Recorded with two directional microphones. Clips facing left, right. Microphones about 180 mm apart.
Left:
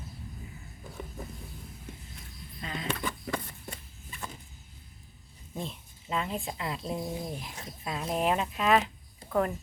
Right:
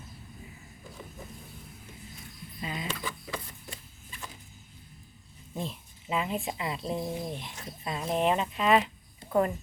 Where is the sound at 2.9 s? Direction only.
55° left (ahead or behind).